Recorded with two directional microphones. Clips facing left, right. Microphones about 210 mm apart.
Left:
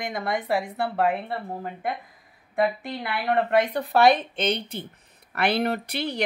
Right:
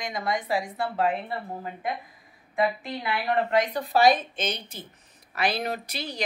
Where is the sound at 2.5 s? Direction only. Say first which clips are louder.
Left 2 dB; 55° left (ahead or behind).